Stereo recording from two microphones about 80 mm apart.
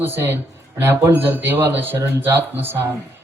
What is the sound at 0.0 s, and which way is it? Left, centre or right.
A man's voice, right.